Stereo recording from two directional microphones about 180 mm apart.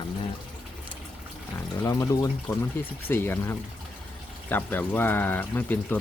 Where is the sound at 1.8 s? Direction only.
20° left (ahead or behind).